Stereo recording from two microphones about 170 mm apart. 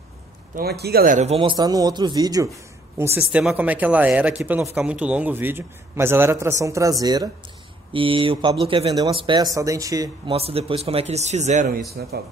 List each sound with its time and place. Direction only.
0.6 s a man's voice: 70° right (ahead or behind); by 1.3 s 50° right (ahead or behind)
1.3 s speech: 30° right (ahead or behind)
3.2 s a man's voice: 5° right (ahead or behind); by 10.3 s 20° right (ahead or behind)
10.3 s a man's voice: 35° right (ahead or behind)
12.0 s speech: 70° right (ahead or behind)